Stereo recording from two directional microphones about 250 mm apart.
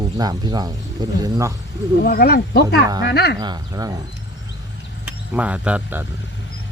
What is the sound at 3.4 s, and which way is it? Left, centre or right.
Speech, centre.